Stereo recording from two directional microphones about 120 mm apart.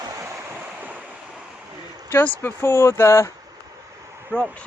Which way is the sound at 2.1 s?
15° left (ahead or behind).